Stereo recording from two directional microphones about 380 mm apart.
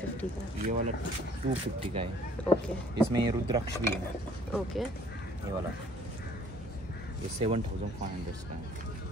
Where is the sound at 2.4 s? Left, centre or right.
Centre.